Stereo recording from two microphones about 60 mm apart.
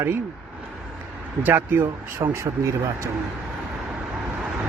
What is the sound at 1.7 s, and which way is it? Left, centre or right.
Speech, right.